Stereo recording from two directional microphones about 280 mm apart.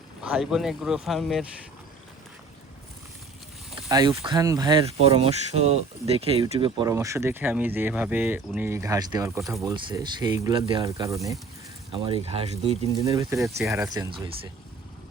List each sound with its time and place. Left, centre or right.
0.2 s speech: centre
3.8 s speech: centre
9.4 s speech: centre
9.6 s speech: centre